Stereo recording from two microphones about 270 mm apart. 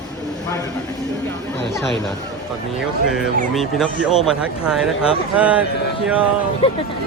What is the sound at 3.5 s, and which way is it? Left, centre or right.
Speech, centre.